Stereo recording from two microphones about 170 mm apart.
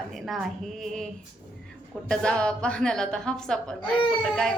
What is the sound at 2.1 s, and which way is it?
A woman's voice, 5° left (ahead or behind).